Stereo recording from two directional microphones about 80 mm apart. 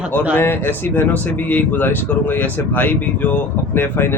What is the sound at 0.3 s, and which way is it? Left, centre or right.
Speech, left.